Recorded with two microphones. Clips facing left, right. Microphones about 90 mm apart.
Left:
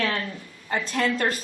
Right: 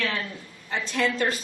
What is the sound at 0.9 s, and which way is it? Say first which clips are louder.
Speech: even; 45° left (ahead or behind).